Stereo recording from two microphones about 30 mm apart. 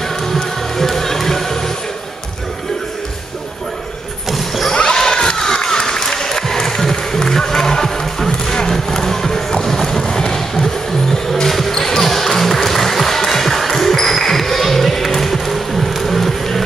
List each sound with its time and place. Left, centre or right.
0.3 s music: centre
4.7 s a sound: left
5.4 s applause: centre
8.3 s music: left
11.4 s basketball bounce: centre